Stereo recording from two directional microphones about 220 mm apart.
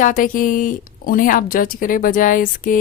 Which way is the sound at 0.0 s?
40° left (ahead or behind).